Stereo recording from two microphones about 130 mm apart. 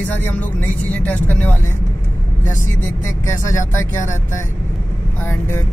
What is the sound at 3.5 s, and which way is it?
Speech, 25° left (ahead or behind).